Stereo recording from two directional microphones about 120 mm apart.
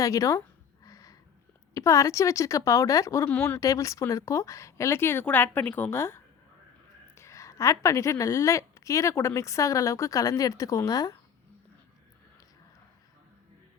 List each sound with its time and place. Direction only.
0.0 s a woman's voice: 30° left (ahead or behind)
0.9 s a sound: 30° left (ahead or behind)
1.7 s a woman's voice: 25° left (ahead or behind)
3.2 s speech: 15° left (ahead or behind)
3.6 s a woman's voice: 25° left (ahead or behind)